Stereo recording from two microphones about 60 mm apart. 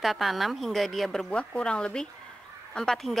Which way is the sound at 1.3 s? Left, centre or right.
Centre.